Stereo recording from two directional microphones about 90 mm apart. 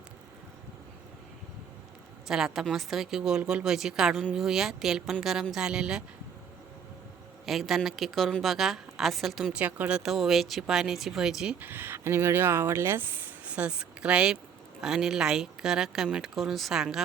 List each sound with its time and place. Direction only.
2.2 s a woman's voice: 5° right (ahead or behind)
7.4 s a man's voice: centre (ahead or behind)
11.6 s a woman's voice: 20° right (ahead or behind); by 17.0 s 5° right (ahead or behind)